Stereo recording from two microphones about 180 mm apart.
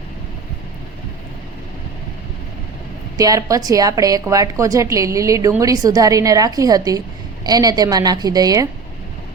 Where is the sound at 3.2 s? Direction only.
20° right (ahead or behind).